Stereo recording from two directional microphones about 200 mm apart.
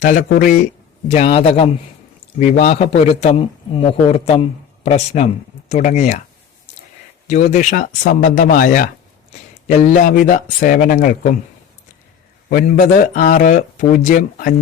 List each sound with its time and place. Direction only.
0.0 s a man's voice: 40° left (ahead or behind)
7.3 s a man's voice: 35° left (ahead or behind)
12.5 s a man's voice: 40° left (ahead or behind)